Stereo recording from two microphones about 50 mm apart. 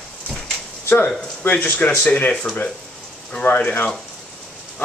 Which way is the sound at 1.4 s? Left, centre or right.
Left.